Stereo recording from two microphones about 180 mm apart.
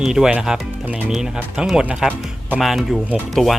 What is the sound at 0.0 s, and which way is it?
Speech, 5° right (ahead or behind).